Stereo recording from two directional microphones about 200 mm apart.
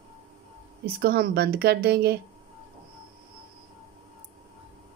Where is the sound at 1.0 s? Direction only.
50° right (ahead or behind).